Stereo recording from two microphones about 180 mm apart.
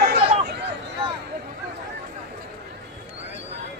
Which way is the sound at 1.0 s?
25° right (ahead or behind).